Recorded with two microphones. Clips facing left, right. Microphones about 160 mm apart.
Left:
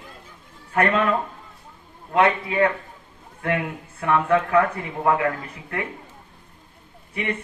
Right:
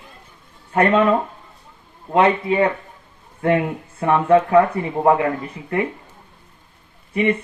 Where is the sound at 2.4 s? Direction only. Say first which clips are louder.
Right 3 dB; 30° right (ahead or behind).